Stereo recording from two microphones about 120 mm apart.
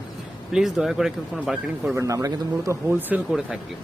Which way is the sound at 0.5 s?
5° right (ahead or behind).